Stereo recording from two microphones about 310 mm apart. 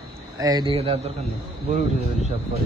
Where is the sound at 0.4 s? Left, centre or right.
Centre.